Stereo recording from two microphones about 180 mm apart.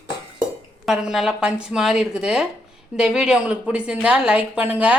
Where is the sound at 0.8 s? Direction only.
Centre (ahead or behind).